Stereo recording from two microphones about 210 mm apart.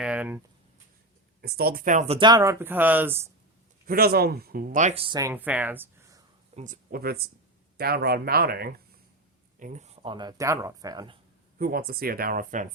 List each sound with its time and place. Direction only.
0.0 s a sound: 5° right (ahead or behind)
1.4 s speech: 50° right (ahead or behind); by 3.2 s 10° right (ahead or behind)
3.8 s speech: 45° right (ahead or behind); by 5.3 s 20° right (ahead or behind)
5.3 s speech: 10° right (ahead or behind)
6.6 s speech: 40° right (ahead or behind)
9.6 s speech: 35° right (ahead or behind); by 11.2 s 20° right (ahead or behind)
11.5 s speech: 45° right (ahead or behind)